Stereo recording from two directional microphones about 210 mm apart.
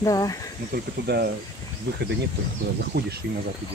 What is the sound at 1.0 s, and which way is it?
Speech, 50° right (ahead or behind).